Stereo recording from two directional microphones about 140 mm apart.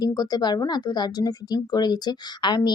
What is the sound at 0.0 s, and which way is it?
Speech, 30° left (ahead or behind).